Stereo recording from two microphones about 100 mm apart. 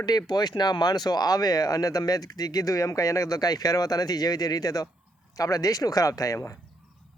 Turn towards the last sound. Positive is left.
turn(degrees=30)  # may be behind; listen again after turning